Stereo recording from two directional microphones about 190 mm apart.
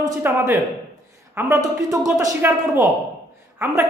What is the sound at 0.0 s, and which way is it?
A woman's voice, 10° right (ahead or behind).